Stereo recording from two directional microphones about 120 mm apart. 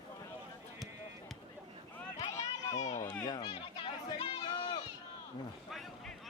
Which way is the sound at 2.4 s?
70° left (ahead or behind).